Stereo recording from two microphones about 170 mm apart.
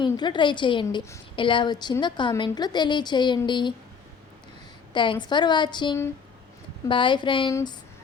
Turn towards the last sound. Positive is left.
turn(degrees=30)  # may be behind; listen again after turning